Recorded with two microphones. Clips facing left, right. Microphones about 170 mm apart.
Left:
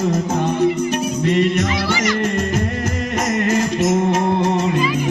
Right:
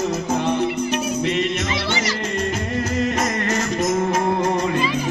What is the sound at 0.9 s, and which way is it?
Music, 50° left (ahead or behind).